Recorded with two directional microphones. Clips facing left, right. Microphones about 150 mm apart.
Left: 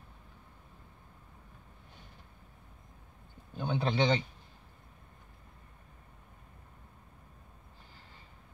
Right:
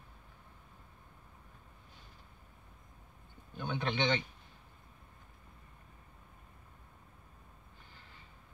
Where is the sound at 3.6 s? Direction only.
30° left (ahead or behind).